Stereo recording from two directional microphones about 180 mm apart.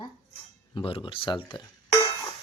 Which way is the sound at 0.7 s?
30° left (ahead or behind).